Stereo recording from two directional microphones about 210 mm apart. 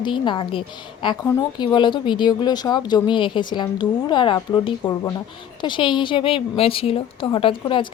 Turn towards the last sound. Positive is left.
turn(degrees=25)  # may be behind; listen again after turning